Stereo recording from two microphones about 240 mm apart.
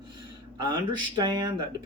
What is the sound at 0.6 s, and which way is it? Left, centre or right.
Speech, centre.